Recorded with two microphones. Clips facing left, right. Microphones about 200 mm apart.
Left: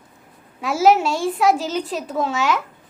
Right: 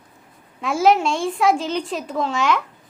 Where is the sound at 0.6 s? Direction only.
5° left (ahead or behind).